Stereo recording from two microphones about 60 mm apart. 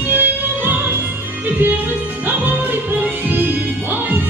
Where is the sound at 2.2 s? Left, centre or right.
Right.